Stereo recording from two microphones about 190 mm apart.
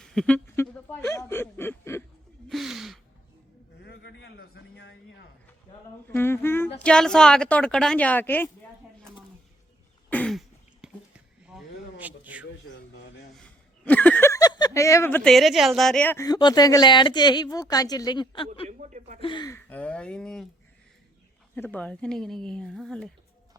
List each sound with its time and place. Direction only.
0.0 s speech: 5° left (ahead or behind)
2.5 s gasp: centre (ahead or behind)
3.8 s a sound: 65° left (ahead or behind)
6.1 s speech: 10° left (ahead or behind)
10.1 s throat clearing: 5° left (ahead or behind)
11.4 s a sound: 5° right (ahead or behind)
13.3 s speech: 5° left (ahead or behind); by 18.4 s 25° left (ahead or behind)
18.7 s speech: 40° right (ahead or behind)
19.2 s speech: 25° left (ahead or behind)
19.5 s speech: 10° left (ahead or behind)
21.5 s speech: 10° left (ahead or behind)